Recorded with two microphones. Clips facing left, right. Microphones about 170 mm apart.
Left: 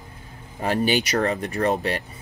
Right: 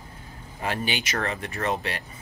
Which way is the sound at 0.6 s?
40° left (ahead or behind).